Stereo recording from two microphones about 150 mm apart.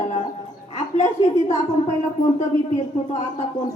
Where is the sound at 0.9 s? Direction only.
50° left (ahead or behind).